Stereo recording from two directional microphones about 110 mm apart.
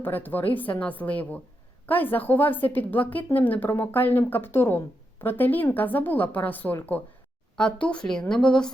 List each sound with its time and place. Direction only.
0.0 s a woman's voice: 15° left (ahead or behind)